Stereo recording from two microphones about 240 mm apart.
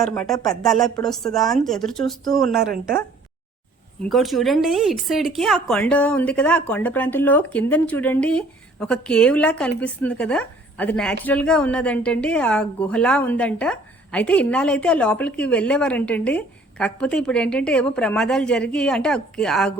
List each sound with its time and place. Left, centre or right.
0.0 s speech: centre
2.7 s speech: right
4.0 s speech: centre